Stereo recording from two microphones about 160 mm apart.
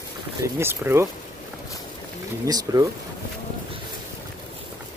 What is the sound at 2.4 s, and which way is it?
Speech, 20° right (ahead or behind).